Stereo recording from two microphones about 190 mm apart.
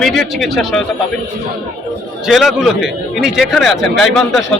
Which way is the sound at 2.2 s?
Centre (ahead or behind).